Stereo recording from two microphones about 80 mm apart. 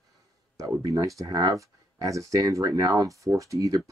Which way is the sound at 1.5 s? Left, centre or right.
Right.